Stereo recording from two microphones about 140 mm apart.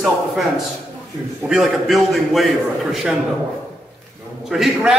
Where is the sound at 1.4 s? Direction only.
Centre (ahead or behind).